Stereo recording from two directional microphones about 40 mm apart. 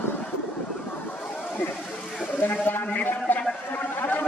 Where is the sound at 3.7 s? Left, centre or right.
Left.